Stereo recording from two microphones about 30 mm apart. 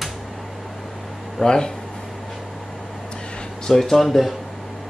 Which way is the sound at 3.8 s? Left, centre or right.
Centre.